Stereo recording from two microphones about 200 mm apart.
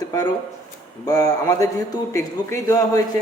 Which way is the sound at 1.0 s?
15° left (ahead or behind).